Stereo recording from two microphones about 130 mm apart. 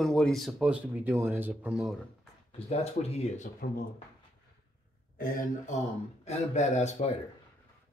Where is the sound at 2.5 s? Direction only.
55° left (ahead or behind).